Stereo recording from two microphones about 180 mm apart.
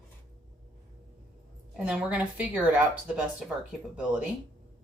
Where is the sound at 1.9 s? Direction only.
5° right (ahead or behind).